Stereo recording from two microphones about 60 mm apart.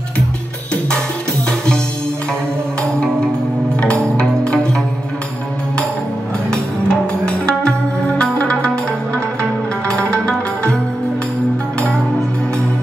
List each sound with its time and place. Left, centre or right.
3.8 s music: centre
6.5 s music: centre